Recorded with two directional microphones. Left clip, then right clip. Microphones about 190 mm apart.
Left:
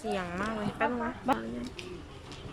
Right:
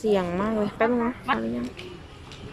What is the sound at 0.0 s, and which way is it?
Speech, 30° right (ahead or behind).